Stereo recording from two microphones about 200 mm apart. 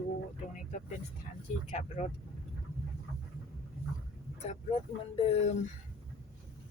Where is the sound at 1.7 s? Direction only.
35° left (ahead or behind).